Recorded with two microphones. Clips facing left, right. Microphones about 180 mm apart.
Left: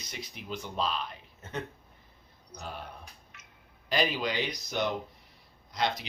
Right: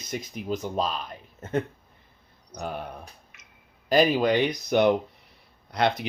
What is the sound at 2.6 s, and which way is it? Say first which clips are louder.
Speech: right 8 dB; 60° right (ahead or behind).